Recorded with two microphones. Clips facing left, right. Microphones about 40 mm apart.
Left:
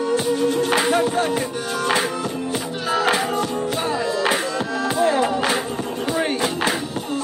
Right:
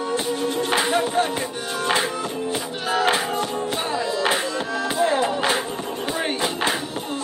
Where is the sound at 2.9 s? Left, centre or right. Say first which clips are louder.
Left 1 dB; right.